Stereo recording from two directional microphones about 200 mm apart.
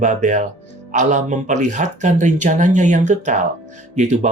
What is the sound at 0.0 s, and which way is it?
Speech, 40° right (ahead or behind).